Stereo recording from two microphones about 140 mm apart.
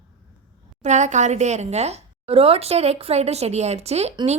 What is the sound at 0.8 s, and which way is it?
Speech, 55° right (ahead or behind).